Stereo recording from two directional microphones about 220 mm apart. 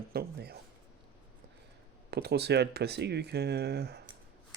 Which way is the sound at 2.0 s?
50° right (ahead or behind).